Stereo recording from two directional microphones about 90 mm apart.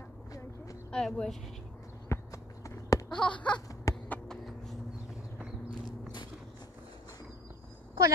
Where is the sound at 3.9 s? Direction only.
40° left (ahead or behind).